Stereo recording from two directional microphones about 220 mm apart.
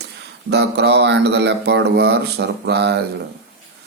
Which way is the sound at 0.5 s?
50° right (ahead or behind).